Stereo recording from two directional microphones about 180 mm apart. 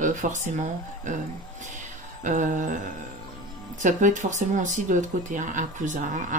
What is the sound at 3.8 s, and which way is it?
Speech, 45° right (ahead or behind).